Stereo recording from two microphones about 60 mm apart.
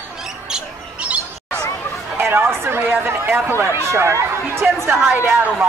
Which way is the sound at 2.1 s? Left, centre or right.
Right.